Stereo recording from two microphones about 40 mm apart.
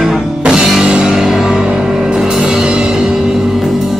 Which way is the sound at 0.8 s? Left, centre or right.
Centre.